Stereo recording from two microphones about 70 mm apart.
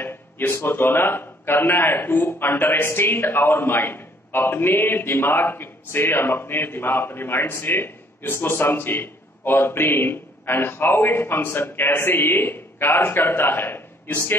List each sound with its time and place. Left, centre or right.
0.5 s a man's voice: left